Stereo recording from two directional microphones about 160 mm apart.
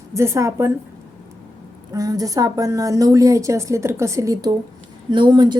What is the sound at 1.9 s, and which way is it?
A woman's voice, 20° right (ahead or behind).